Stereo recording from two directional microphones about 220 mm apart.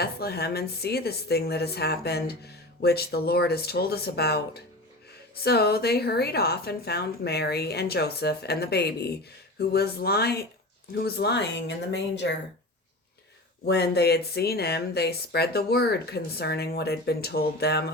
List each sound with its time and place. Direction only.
0.0 s a woman's voice: 45° left (ahead or behind)
13.7 s a woman's voice: 45° left (ahead or behind)